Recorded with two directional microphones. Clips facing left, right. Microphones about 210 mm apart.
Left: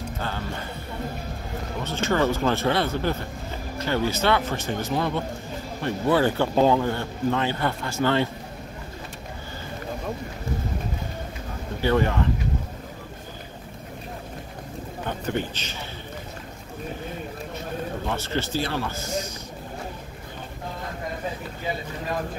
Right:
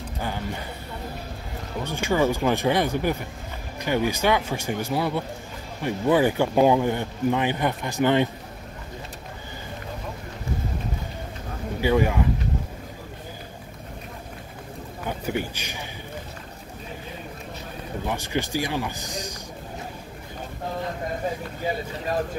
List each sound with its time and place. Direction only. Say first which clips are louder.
0.2 s speech: right 3 dB; 15° right (ahead or behind)
1.9 s speech: right 1 dB; 10° right (ahead or behind)
11.8 s speech: right 1 dB; 10° right (ahead or behind)
15.0 s speech: even; 10° right (ahead or behind)
18.0 s speech: right 4 dB; 15° right (ahead or behind)